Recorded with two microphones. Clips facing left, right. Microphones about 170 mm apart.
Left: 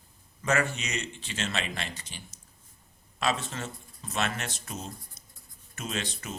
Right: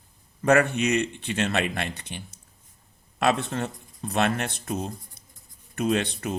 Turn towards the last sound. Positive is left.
turn(degrees=-55)  # may be behind; listen again after turning